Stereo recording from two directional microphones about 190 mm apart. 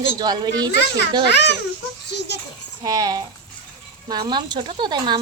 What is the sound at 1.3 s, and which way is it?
A child's voice, 65° left (ahead or behind).